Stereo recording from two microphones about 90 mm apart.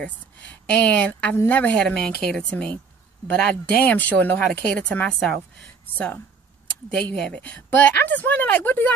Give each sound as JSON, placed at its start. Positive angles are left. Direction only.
{"t": 0.0, "sound": "a woman's voice", "side_deg": 15}
{"t": 3.8, "sound": "a woman's voice", "side_deg": 15}